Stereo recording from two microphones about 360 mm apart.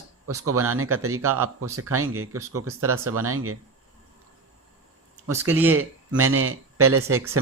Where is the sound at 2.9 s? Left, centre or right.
Centre.